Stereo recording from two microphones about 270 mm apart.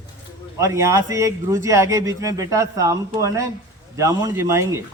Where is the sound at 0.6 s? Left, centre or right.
Centre.